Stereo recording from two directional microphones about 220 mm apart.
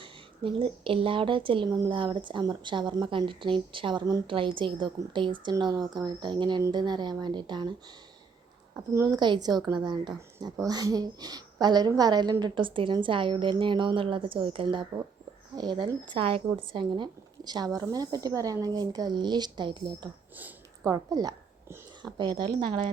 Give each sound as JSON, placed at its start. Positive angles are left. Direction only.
{"t": 0.0, "sound": "speech", "side_deg": -25}
{"t": 8.7, "sound": "a woman's voice", "side_deg": -10}
{"t": 20.3, "sound": "a sound", "side_deg": -10}
{"t": 22.2, "sound": "speech", "side_deg": -20}